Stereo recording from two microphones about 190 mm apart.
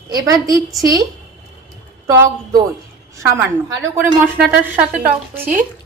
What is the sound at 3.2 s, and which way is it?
Speech, 15° right (ahead or behind).